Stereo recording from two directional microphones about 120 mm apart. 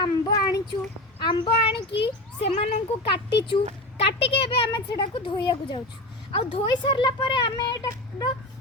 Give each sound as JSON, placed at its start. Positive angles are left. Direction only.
{"t": 0.0, "sound": "child singing", "side_deg": 35}
{"t": 1.2, "sound": "a sound", "side_deg": 45}
{"t": 2.4, "sound": "speech", "side_deg": 55}